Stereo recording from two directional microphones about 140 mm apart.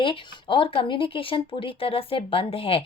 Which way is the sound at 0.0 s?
40° left (ahead or behind).